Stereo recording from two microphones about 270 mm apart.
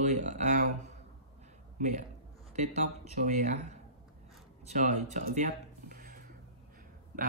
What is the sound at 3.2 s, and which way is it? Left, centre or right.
Speech, right.